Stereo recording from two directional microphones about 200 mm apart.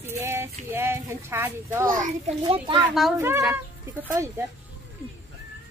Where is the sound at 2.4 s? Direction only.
25° right (ahead or behind).